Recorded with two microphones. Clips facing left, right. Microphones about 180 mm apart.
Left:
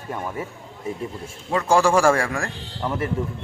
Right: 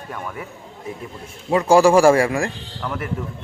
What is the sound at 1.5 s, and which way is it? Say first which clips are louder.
Speech: right 5 dB; 10° right (ahead or behind).